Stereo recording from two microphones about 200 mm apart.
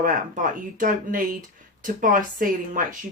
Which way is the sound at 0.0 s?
40° right (ahead or behind).